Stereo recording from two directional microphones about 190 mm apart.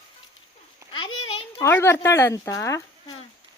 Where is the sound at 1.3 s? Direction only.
30° left (ahead or behind).